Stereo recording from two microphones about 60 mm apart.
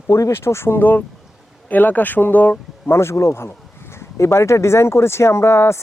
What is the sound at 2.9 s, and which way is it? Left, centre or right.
Speech, left.